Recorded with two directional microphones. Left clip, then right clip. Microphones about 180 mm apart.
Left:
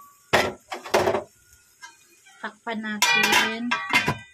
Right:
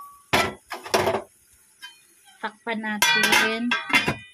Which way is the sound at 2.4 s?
30° right (ahead or behind).